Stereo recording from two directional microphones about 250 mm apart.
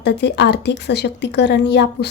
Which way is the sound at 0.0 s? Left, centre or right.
Left.